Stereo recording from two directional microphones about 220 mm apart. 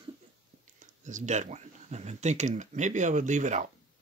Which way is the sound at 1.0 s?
35° right (ahead or behind).